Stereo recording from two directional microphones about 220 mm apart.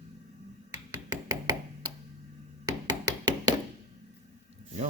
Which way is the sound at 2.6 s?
20° right (ahead or behind).